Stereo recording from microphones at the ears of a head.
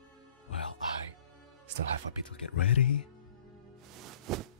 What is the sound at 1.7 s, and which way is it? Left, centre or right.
Speech, right.